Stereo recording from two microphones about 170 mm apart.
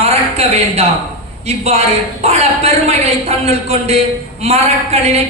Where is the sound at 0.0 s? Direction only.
35° right (ahead or behind).